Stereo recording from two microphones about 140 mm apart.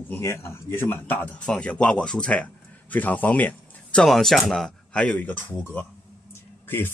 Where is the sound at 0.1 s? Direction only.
20° left (ahead or behind).